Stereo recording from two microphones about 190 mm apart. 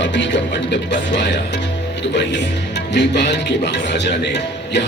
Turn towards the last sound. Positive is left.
turn(degrees=65)  # may be behind; listen again after turning